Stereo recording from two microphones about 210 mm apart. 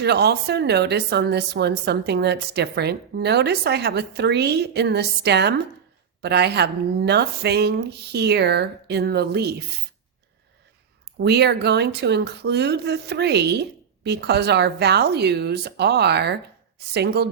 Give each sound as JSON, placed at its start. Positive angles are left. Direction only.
{"t": 0.0, "sound": "speech", "side_deg": -50}
{"t": 11.2, "sound": "speech", "side_deg": -50}